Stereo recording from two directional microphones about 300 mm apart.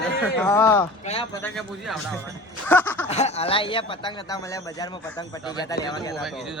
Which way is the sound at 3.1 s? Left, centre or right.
Left.